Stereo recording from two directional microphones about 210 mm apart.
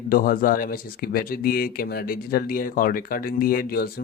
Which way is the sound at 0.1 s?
40° left (ahead or behind).